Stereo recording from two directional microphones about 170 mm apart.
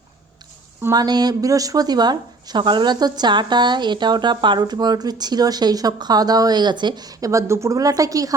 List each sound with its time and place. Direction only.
0.8 s speech: 20° right (ahead or behind)